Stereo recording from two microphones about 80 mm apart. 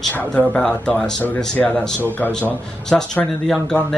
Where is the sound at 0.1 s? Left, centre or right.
Centre.